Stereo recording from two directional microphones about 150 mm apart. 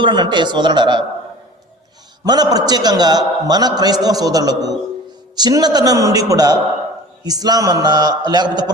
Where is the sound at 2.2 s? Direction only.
25° right (ahead or behind).